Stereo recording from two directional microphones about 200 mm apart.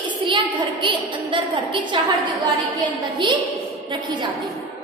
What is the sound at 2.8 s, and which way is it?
Speech, 25° right (ahead or behind).